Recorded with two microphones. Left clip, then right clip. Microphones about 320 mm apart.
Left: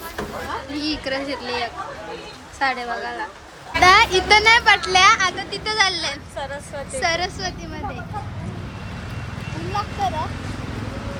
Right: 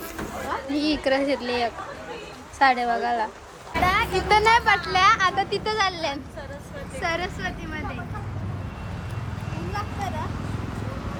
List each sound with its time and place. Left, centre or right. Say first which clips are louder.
0.7 s speech: right 4 dB; centre
3.8 s a sound: left 10 dB; centre
4.1 s speech: left 4 dB; centre